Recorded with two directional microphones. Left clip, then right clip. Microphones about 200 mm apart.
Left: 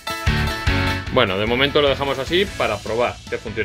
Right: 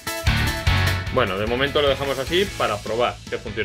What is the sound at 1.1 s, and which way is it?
Speech, 40° left (ahead or behind).